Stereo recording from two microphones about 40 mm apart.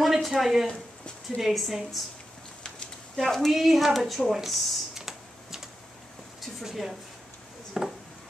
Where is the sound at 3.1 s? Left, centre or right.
Centre.